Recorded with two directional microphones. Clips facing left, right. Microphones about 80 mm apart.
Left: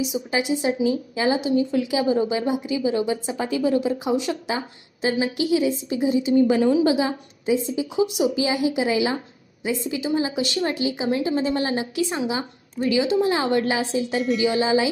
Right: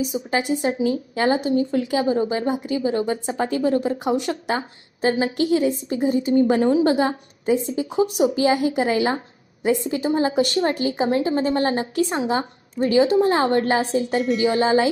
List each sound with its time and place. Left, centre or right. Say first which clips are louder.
0.0 s a woman's voice: right 1 dB; right